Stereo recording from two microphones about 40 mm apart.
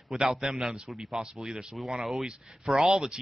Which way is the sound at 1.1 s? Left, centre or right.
Centre.